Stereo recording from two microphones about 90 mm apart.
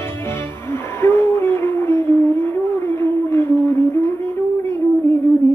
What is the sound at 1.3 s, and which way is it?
Howl, 25° left (ahead or behind).